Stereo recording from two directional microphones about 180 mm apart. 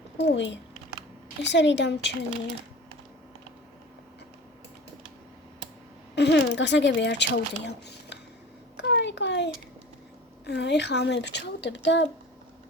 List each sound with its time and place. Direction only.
0.3 s speech: 80° left
6.1 s speech: 70° left (ahead or behind)
8.7 s a sound: 75° left (ahead or behind)
10.4 s speech: 70° left (ahead or behind)